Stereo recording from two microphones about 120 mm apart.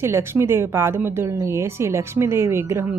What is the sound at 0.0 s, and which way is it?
A woman's voice, 20° right (ahead or behind).